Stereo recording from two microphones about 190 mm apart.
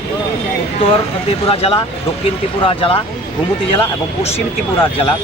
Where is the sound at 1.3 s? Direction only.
30° left (ahead or behind).